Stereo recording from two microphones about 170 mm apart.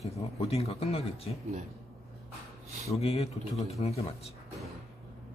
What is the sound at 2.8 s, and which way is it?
Speech, 35° left (ahead or behind).